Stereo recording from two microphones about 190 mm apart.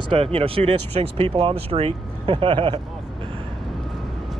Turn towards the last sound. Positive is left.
turn(degrees=-25)  # may be behind; listen again after turning